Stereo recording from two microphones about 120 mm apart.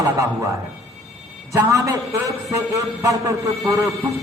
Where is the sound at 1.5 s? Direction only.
25° right (ahead or behind).